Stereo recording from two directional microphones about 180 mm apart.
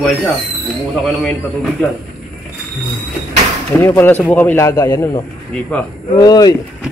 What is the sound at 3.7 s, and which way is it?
A man's voice, 15° left (ahead or behind).